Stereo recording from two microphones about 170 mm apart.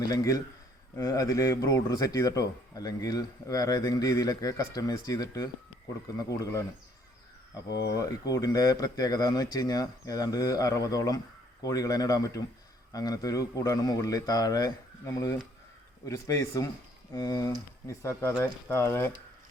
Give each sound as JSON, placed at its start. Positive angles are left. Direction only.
{"t": 0.0, "sound": "speech", "side_deg": 20}
{"t": 7.9, "sound": "speech", "side_deg": 20}
{"t": 16.0, "sound": "speech", "side_deg": 20}